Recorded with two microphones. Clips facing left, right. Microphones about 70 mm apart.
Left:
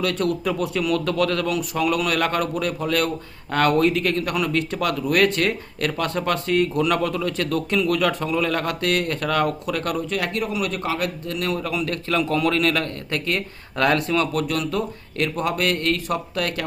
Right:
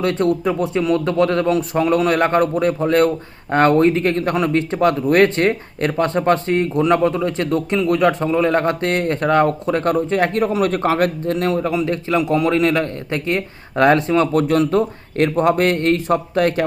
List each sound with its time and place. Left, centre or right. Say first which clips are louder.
0.0 s speech: right 5 dB; right